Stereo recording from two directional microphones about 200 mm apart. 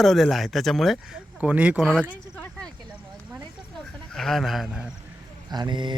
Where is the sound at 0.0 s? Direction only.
Centre (ahead or behind).